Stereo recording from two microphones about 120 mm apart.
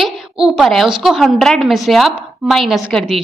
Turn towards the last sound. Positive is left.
turn(degrees=0)  # may be behind; listen again after turning